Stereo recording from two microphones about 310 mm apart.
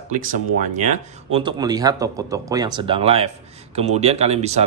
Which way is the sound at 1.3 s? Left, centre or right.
Centre.